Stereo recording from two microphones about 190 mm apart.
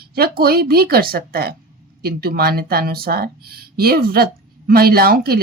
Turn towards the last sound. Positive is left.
turn(degrees=-50)  # may be behind; listen again after turning